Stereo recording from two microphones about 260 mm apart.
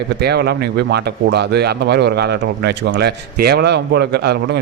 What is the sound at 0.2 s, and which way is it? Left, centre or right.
Speech, right.